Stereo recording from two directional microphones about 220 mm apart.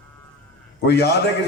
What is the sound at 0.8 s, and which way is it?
Speech, 50° left (ahead or behind).